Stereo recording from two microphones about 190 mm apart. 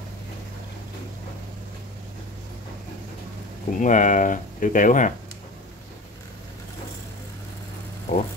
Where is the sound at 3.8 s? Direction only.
40° left (ahead or behind).